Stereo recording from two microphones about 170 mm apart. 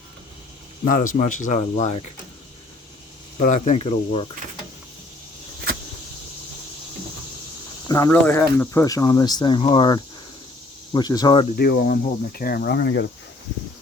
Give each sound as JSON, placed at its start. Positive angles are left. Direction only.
{"t": 0.9, "sound": "speech", "side_deg": 50}
{"t": 3.3, "sound": "speech", "side_deg": 45}
{"t": 7.9, "sound": "speech", "side_deg": 20}
{"t": 11.5, "sound": "speech", "side_deg": 65}